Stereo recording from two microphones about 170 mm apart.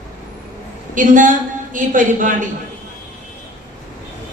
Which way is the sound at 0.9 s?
50° right (ahead or behind).